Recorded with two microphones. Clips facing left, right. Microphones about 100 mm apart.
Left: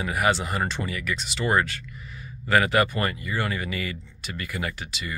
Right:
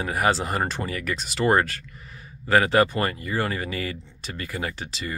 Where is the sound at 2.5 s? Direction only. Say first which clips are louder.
Right 2 dB; 30° right (ahead or behind).